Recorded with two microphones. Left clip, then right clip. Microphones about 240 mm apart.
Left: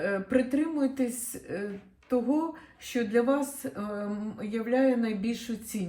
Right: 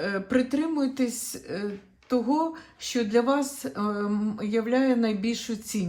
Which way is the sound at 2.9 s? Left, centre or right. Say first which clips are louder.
Right 2 dB; right.